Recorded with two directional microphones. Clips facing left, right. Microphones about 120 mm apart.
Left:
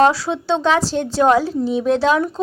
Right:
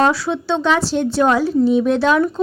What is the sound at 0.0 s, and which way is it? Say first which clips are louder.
A woman's voice: left 1 dB; 35° left (ahead or behind).